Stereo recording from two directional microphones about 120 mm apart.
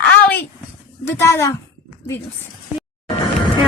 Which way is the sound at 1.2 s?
20° left (ahead or behind).